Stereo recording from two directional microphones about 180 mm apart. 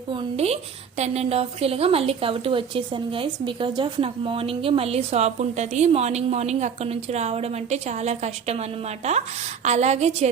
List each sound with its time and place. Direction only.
0.1 s a woman's voice: 30° right (ahead or behind)